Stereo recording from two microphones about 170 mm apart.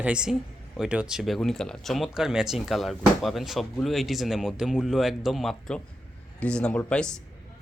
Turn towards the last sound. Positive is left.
turn(degrees=5)  # may be behind; listen again after turning